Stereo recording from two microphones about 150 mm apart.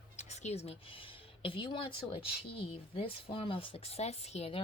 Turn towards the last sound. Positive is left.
turn(degrees=45)  # may be behind; listen again after turning